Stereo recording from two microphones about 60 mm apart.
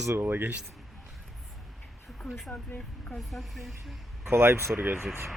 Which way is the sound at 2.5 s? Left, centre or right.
Left.